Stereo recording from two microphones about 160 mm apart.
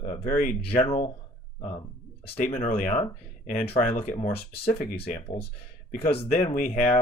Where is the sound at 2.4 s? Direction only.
45° left (ahead or behind).